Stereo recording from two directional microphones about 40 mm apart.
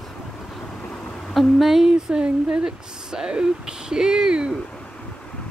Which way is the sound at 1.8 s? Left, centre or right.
Right.